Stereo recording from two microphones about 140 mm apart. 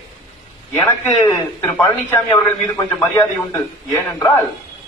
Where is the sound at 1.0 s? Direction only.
15° left (ahead or behind).